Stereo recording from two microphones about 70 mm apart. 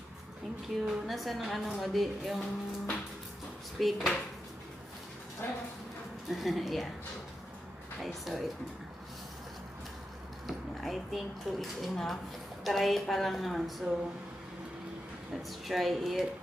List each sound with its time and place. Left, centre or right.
0.9 s a woman's voice: centre
2.4 s speech: centre
3.8 s a woman's voice: centre
6.3 s a woman's voice: centre
8.0 s a woman's voice: centre
10.4 s a sound: centre
11.5 s a woman's voice: centre
15.4 s a woman's voice: centre